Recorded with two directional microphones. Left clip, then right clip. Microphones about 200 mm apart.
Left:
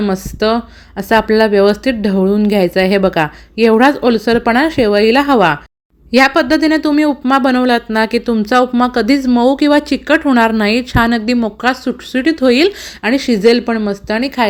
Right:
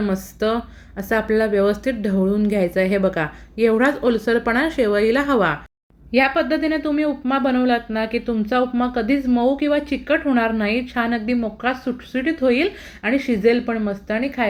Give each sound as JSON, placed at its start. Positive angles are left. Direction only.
{"t": 0.0, "sound": "speech", "side_deg": 40}
{"t": 6.1, "sound": "speech", "side_deg": 60}